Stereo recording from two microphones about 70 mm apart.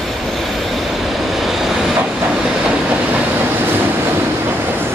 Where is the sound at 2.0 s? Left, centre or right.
Centre.